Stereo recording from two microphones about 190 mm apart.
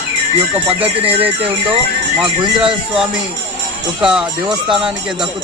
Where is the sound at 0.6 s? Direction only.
30° right (ahead or behind).